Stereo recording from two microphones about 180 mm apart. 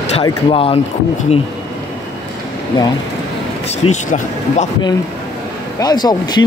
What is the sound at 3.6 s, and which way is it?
Speech, 40° left (ahead or behind).